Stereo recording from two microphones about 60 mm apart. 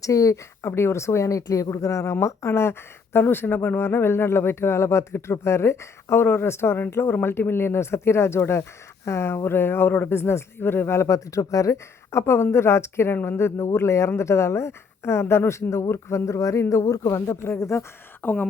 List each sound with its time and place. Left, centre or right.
0.0 s speech: left
0.7 s speech: left
17.6 s speech: left
18.2 s speech: left